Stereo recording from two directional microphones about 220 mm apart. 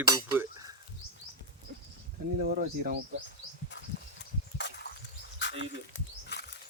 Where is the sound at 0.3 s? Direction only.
15° right (ahead or behind).